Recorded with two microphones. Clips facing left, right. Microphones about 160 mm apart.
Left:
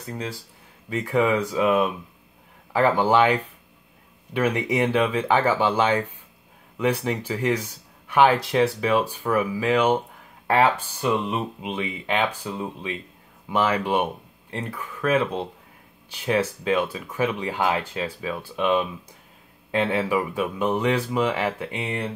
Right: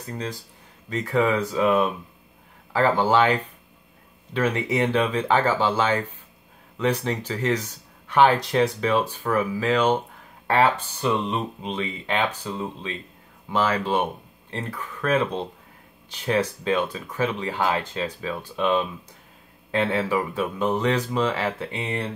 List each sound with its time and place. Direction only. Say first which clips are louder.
0.1 s speech: even; 10° left (ahead or behind)